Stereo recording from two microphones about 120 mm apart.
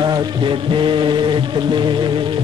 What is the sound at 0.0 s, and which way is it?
Music, 40° right (ahead or behind).